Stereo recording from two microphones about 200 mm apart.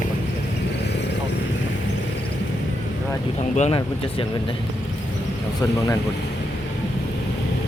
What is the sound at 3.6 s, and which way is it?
Speech, 30° left (ahead or behind).